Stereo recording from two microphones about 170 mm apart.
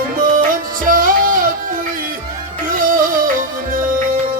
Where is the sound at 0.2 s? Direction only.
55° right (ahead or behind).